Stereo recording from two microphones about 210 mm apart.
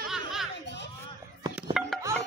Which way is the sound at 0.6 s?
55° left (ahead or behind).